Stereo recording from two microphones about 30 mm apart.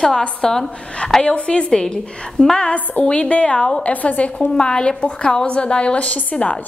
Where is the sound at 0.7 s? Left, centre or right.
Left.